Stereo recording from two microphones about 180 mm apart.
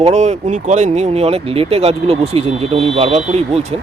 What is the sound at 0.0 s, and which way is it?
Speech, 40° right (ahead or behind).